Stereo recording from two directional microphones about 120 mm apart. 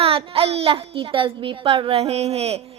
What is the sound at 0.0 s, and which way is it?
A child's voice, 50° right (ahead or behind).